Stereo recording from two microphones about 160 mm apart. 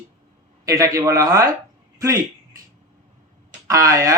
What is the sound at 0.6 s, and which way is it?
Speech, 20° right (ahead or behind).